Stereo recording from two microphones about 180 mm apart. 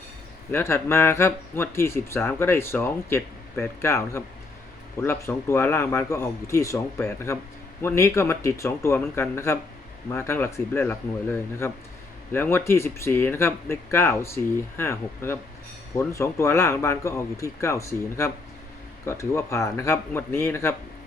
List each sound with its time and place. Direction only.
0.5 s speech: 15° left (ahead or behind)